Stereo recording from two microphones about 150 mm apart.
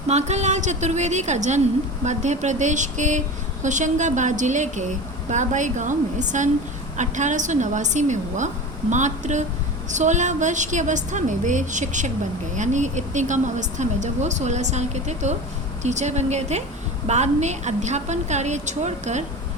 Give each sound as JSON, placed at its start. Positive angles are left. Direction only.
{"t": 0.1, "sound": "speech", "side_deg": -45}